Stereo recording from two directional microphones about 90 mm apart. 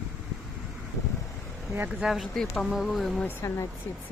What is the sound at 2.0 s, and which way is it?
Speech, 5° right (ahead or behind).